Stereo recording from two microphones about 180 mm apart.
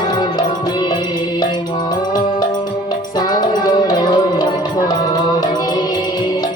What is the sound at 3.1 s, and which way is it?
Music, 20° left (ahead or behind).